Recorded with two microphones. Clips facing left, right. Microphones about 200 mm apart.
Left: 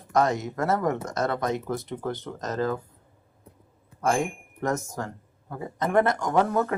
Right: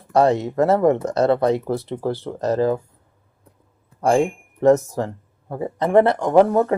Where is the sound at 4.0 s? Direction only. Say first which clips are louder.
Right 8 dB; 30° right (ahead or behind).